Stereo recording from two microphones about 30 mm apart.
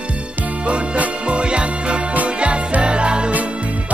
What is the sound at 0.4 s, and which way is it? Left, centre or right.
Music, right.